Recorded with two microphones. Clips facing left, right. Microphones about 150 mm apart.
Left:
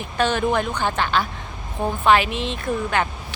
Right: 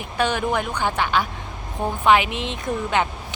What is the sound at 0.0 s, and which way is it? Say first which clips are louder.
Speech: left 2 dB; 15° right (ahead or behind).